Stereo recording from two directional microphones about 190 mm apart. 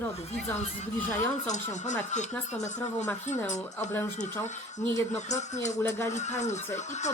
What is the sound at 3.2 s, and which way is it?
Speech, 40° left (ahead or behind).